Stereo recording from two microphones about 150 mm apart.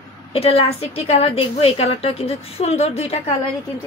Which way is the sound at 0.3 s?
40° left (ahead or behind).